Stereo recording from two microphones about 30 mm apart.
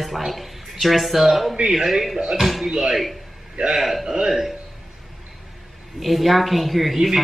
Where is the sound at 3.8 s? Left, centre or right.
Centre.